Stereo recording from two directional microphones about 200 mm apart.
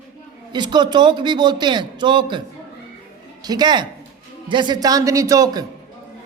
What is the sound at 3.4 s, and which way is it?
A man's voice, 20° right (ahead or behind).